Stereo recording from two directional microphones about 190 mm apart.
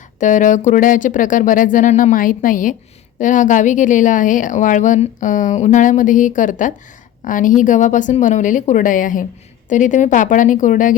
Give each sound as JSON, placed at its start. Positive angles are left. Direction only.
{"t": 0.2, "sound": "a woman's voice", "side_deg": 40}